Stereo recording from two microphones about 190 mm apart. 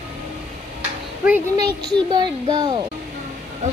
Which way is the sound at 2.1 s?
20° right (ahead or behind).